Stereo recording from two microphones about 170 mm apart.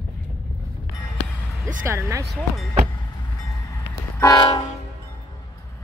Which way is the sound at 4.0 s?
20° left (ahead or behind).